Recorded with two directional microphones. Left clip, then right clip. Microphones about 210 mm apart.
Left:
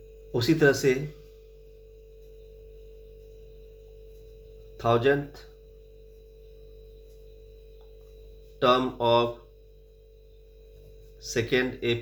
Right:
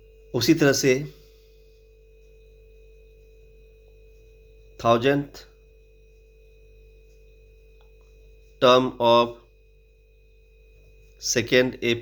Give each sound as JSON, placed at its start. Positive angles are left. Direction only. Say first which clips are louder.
{"t": 0.3, "sound": "speech", "louder": "right 2 dB", "side_deg": -45}
{"t": 4.8, "sound": "speech", "louder": "right 3 dB", "side_deg": -50}
{"t": 8.5, "sound": "speech", "louder": "right 5 dB", "side_deg": -50}
{"t": 11.2, "sound": "speech", "louder": "right 6 dB", "side_deg": -50}